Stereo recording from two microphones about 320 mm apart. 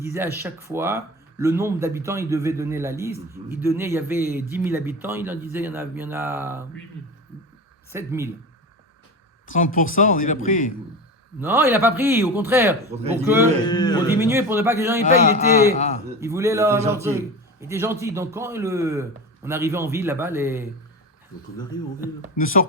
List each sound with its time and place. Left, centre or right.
0.0 s speech: centre
7.9 s speech: centre
9.5 s speech: left
11.3 s speech: centre
13.7 s speech: centre
14.2 s speech: centre
16.2 s speech: centre
22.4 s speech: left